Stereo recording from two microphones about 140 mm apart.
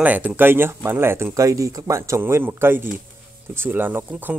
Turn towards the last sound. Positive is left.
turn(degrees=-15)  # may be behind; listen again after turning